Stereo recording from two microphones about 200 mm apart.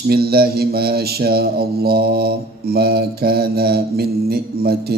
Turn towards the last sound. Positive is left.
turn(degrees=-50)  # may be behind; listen again after turning